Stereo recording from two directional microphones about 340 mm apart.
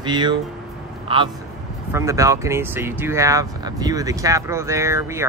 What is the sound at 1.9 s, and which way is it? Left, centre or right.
Speech, centre.